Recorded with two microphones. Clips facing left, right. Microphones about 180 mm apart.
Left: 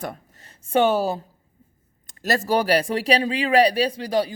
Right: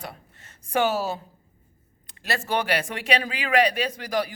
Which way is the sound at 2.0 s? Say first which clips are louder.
Left 6 dB; 40° left (ahead or behind).